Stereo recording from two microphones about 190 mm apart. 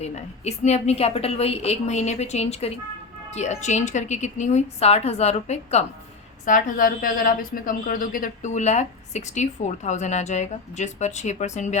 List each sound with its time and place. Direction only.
0.0 s a woman's voice: 35° left (ahead or behind)
6.4 s a woman's voice: 45° left (ahead or behind)